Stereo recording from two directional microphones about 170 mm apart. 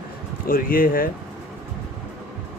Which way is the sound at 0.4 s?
55° left (ahead or behind).